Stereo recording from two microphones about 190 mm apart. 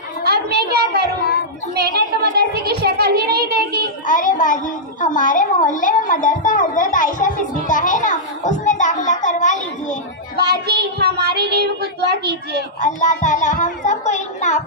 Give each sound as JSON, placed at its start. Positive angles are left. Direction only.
{"t": 0.2, "sound": "a woman's voice", "side_deg": -55}
{"t": 4.1, "sound": "a woman's voice", "side_deg": 45}
{"t": 10.3, "sound": "a woman's voice", "side_deg": -55}
{"t": 12.8, "sound": "a child's voice", "side_deg": 40}